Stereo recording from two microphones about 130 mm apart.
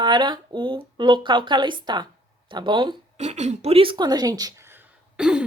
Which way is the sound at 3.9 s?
30° right (ahead or behind).